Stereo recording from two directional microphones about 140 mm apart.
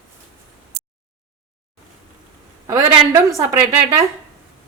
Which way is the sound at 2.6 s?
20° right (ahead or behind).